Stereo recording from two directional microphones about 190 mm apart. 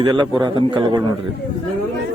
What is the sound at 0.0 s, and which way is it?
A man's voice, 25° right (ahead or behind).